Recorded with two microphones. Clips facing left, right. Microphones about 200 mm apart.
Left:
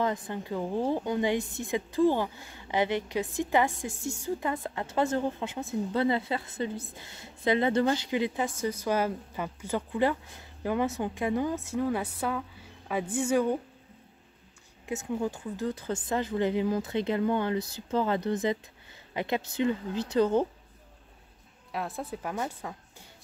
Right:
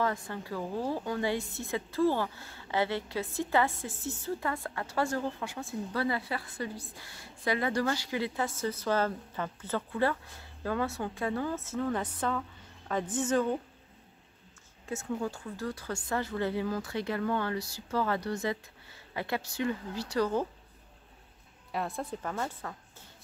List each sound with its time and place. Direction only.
0.0 s a woman's voice: 20° left (ahead or behind)
14.9 s speech: 15° left (ahead or behind)
21.7 s a woman's voice: centre (ahead or behind)